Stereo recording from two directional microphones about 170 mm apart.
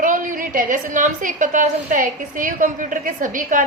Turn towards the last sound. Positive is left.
turn(degrees=-50)  # may be behind; listen again after turning